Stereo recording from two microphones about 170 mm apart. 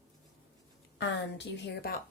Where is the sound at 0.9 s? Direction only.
90° left; by 2.0 s 70° left (ahead or behind).